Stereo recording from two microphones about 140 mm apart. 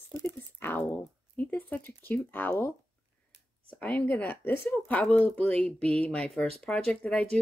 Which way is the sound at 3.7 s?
10° left (ahead or behind).